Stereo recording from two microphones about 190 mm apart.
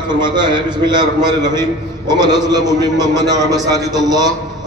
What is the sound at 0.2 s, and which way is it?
A man's voice, 25° right (ahead or behind).